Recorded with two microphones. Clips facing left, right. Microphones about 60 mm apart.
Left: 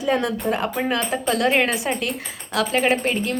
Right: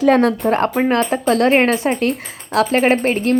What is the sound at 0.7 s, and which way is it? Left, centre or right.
A woman's voice, right.